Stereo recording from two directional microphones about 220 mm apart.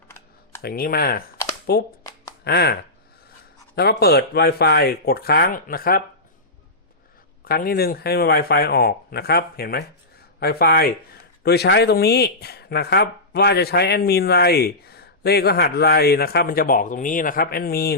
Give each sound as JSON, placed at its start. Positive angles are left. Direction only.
{"t": 0.6, "sound": "speech", "side_deg": 40}
{"t": 3.8, "sound": "speech", "side_deg": 45}
{"t": 7.4, "sound": "speech", "side_deg": 45}